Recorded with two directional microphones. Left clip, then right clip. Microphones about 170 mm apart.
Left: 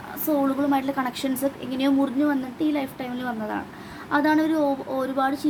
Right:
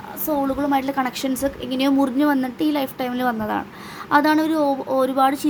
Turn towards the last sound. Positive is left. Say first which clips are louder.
# right 6 dB
turn(degrees=-30)  # may be behind; listen again after turning